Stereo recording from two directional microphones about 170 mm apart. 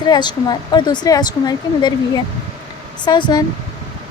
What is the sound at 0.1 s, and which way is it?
Speech, 25° left (ahead or behind).